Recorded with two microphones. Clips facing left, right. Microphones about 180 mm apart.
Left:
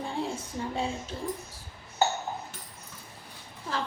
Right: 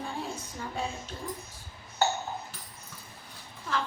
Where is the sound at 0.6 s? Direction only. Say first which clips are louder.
Left 7 dB; 25° left (ahead or behind).